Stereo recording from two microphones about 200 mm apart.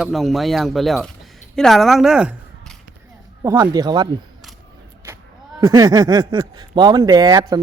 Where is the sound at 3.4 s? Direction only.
15° right (ahead or behind).